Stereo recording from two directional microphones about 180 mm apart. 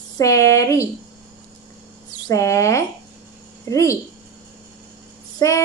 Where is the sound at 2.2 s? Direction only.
15° left (ahead or behind).